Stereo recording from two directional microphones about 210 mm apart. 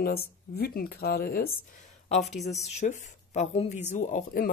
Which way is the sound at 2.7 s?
35° left (ahead or behind).